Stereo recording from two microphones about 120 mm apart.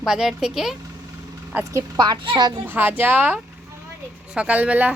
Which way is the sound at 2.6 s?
15° right (ahead or behind).